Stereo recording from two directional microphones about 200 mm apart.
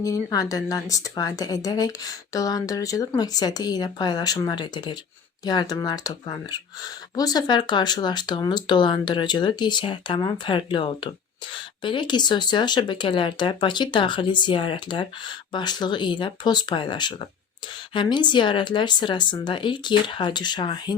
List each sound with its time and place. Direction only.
0.0 s a woman's voice: 15° left (ahead or behind)